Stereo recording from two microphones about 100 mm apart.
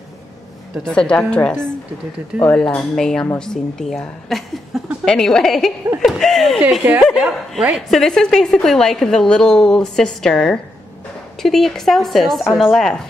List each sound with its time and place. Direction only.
0.8 s a woman's voice: 10° left (ahead or behind)
6.8 s speech: 20° right (ahead or behind)
7.2 s a woman's voice: 5° right (ahead or behind)